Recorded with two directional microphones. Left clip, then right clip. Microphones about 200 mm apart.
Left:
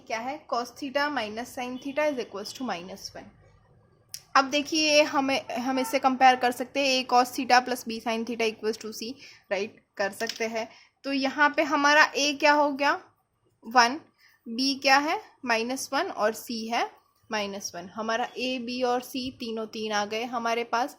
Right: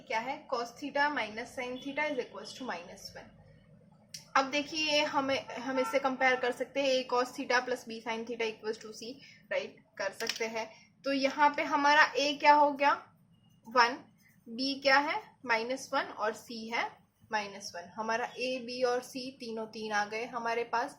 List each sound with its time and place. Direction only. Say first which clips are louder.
0.1 s a woman's voice: left 4 dB; 50° left (ahead or behind)
4.3 s a woman's voice: left 6 dB; 50° left (ahead or behind)
14.5 s a woman's voice: left 5 dB; 55° left (ahead or behind)